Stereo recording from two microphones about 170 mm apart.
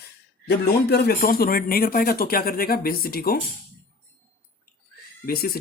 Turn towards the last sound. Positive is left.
turn(degrees=65)  # may be behind; listen again after turning